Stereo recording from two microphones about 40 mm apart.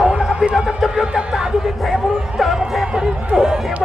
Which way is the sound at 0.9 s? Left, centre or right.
Centre.